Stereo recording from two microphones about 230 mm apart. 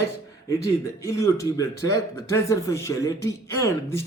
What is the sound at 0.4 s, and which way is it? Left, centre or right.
Speech, centre.